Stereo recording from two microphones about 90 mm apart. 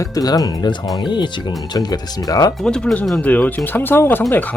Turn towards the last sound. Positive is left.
turn(degrees=25)  # may be behind; listen again after turning